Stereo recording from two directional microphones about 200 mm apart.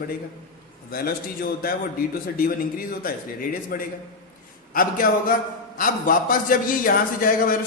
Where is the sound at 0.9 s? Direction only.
45° left (ahead or behind).